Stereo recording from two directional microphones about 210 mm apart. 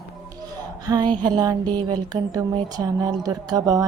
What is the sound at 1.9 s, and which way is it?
A woman's voice, 15° right (ahead or behind).